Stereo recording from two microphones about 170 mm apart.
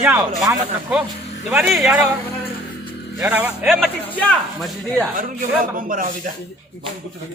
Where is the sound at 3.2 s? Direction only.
10° right (ahead or behind).